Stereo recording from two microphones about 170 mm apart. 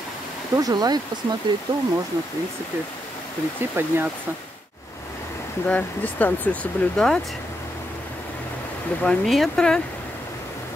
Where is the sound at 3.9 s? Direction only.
15° right (ahead or behind).